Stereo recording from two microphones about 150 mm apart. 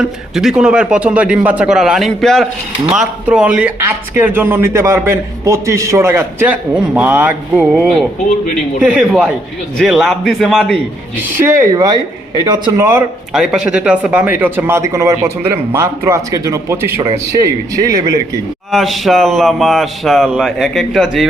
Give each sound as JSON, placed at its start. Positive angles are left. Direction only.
{"t": 0.0, "sound": "speech", "side_deg": -5}
{"t": 8.8, "sound": "speech", "side_deg": -5}
{"t": 11.2, "sound": "speech", "side_deg": -15}
{"t": 13.3, "sound": "speech", "side_deg": -5}
{"t": 18.7, "sound": "speech", "side_deg": 0}